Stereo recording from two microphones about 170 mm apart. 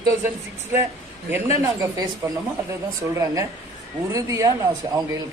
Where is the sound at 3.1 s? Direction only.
20° right (ahead or behind).